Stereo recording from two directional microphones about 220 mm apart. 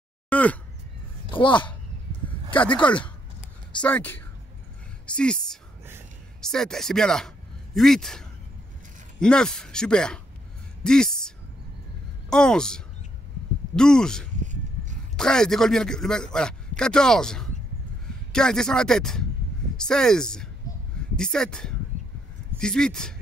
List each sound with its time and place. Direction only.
0.3 s speech: 5° left (ahead or behind)
1.3 s speech: 20° left (ahead or behind)
2.5 s a man's voice: 5° left (ahead or behind)
20.7 s a sound: 15° left (ahead or behind)
21.2 s a man's voice: 5° left (ahead or behind)